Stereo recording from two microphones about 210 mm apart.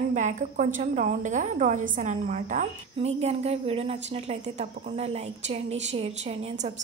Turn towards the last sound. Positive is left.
turn(degrees=-30)  # may be behind; listen again after turning